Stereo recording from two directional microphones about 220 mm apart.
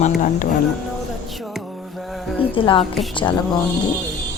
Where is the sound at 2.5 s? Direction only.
25° left (ahead or behind).